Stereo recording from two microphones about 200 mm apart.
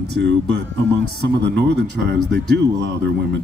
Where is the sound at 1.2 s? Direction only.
60° right (ahead or behind).